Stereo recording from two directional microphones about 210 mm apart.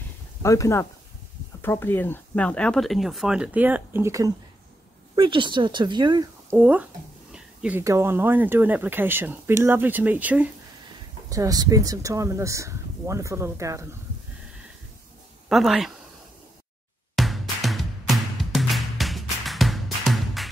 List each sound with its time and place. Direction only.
0.4 s speech: 15° left (ahead or behind); by 6.2 s 20° right (ahead or behind)
6.5 s speech: 5° right (ahead or behind)
15.4 s speech: centre (ahead or behind)
17.1 s music: centre (ahead or behind)